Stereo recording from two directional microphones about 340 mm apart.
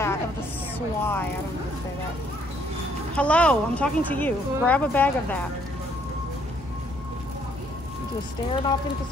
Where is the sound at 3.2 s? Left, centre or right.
Centre.